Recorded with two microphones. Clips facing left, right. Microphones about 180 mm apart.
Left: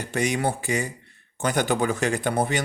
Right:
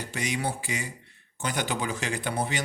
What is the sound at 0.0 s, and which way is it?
Speech, 55° left (ahead or behind).